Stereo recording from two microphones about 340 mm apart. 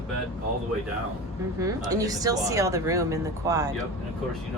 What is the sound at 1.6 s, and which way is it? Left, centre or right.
Speech, centre.